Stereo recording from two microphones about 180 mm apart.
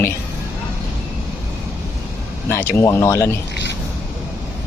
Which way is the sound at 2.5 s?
15° left (ahead or behind).